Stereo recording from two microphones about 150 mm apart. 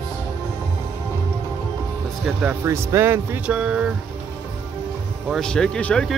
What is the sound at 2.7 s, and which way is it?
Speech, 15° right (ahead or behind).